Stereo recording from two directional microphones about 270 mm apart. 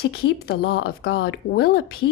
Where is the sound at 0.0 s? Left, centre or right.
Left.